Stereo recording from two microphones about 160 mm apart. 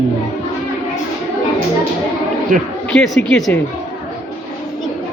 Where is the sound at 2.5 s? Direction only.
55° right (ahead or behind).